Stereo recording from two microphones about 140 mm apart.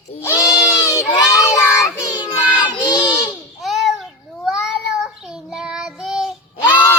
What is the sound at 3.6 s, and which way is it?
Child singing, centre (ahead or behind).